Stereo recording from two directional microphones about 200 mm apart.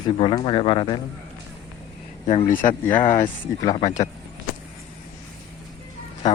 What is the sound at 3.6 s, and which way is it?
Speech, 25° left (ahead or behind).